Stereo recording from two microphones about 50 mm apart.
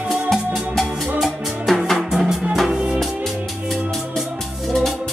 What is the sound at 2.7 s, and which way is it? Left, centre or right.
Music, centre.